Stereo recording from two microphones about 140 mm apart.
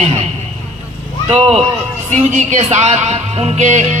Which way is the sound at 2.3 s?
55° right (ahead or behind).